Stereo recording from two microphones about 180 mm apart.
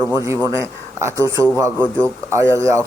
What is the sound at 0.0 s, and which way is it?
Speech, 15° right (ahead or behind).